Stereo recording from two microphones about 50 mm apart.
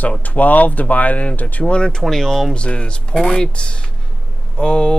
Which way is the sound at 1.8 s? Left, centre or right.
Centre.